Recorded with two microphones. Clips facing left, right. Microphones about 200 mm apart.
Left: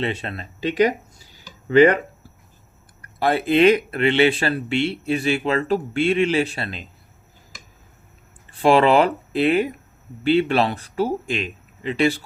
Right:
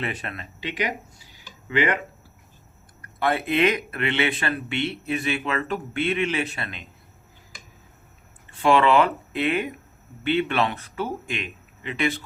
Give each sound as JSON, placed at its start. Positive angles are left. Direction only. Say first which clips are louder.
{"t": 0.0, "sound": "speech", "louder": "left 5 dB", "side_deg": 25}
{"t": 0.6, "sound": "speech", "louder": "left 10 dB", "side_deg": 40}
{"t": 3.0, "sound": "speech", "louder": "left 4 dB", "side_deg": 35}
{"t": 8.4, "sound": "speech", "louder": "left 3 dB", "side_deg": 35}